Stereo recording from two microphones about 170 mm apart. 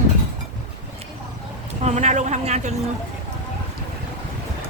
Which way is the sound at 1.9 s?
45° right (ahead or behind).